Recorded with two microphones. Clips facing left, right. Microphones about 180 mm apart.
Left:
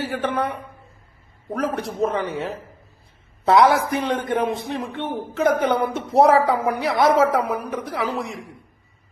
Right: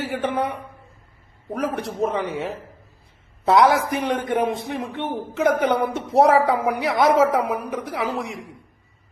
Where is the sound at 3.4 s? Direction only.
Centre (ahead or behind).